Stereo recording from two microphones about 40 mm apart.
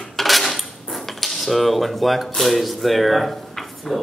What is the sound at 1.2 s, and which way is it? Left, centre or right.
Speech, centre.